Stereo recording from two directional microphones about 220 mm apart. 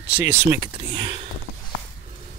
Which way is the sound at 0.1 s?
10° right (ahead or behind).